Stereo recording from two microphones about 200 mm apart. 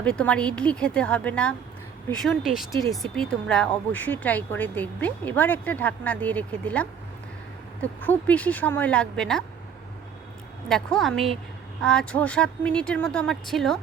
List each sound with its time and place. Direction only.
0.0 s speech: 5° left (ahead or behind)
10.7 s speech: centre (ahead or behind)